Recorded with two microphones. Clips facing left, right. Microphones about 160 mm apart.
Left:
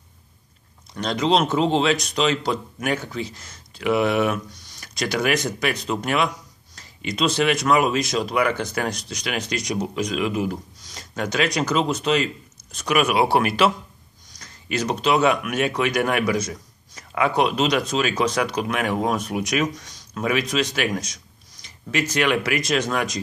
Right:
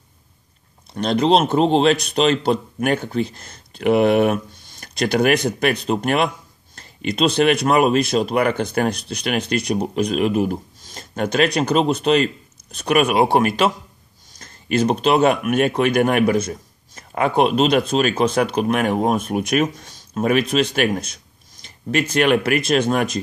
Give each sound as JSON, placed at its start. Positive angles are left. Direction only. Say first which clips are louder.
{"t": 1.0, "sound": "speech", "louder": "right 4 dB", "side_deg": -55}